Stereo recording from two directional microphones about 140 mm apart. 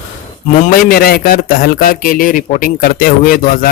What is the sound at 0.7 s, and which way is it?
A man's voice, 90° left.